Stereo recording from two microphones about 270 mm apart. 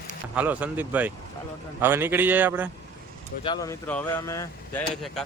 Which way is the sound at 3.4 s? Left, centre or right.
Centre.